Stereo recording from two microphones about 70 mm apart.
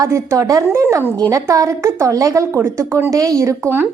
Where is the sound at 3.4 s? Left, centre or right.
Right.